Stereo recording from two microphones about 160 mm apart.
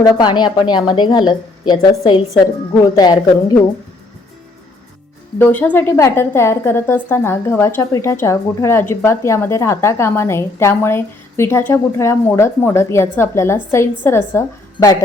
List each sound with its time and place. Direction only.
0.0 s a woman's voice: 25° left (ahead or behind)
5.4 s a woman's voice: 10° left (ahead or behind)